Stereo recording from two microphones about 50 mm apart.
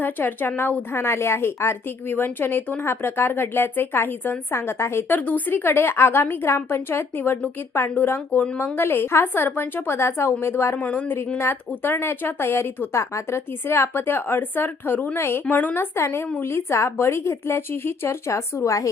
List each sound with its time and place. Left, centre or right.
0.0 s a woman's voice: left
1.0 s a woman's voice: left
2.8 s a woman's voice: left
5.1 s a woman's voice: left
5.6 s a woman's voice: left
6.5 s a woman's voice: left
10.8 s a woman's voice: left
11.3 s a woman's voice: left
12.9 s a woman's voice: left
13.7 s a woman's voice: left
18.3 s speech: left